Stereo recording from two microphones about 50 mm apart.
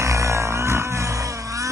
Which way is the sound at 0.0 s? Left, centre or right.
Right.